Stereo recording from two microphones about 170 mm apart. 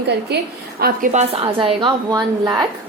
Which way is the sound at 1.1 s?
40° right (ahead or behind).